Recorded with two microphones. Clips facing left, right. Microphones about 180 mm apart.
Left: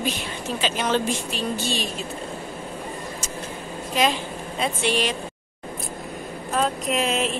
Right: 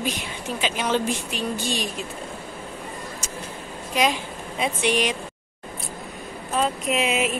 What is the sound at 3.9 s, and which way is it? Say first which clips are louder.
A woman's voice: even; 10° right (ahead or behind).